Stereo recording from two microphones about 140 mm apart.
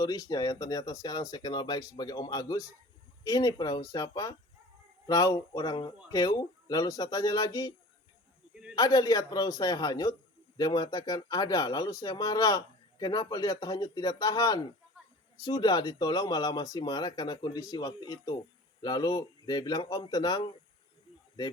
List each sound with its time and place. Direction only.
0.0 s speech: 25° left (ahead or behind)
8.7 s speech: 25° left (ahead or behind)